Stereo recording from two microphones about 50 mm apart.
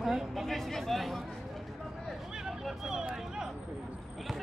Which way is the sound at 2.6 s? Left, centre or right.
Centre.